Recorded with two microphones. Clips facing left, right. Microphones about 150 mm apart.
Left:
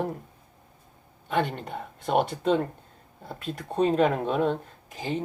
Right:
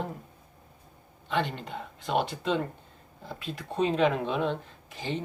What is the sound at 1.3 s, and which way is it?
Speech, 50° left (ahead or behind).